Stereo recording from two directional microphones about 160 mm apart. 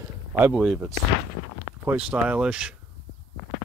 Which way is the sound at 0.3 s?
5° right (ahead or behind).